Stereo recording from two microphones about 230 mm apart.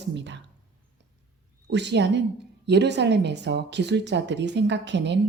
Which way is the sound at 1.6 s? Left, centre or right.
Right.